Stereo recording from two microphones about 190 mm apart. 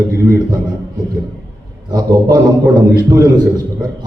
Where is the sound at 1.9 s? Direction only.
20° right (ahead or behind).